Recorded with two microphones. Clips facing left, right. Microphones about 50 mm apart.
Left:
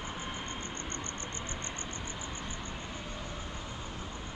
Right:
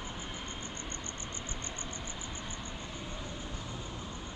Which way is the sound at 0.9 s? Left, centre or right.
Left.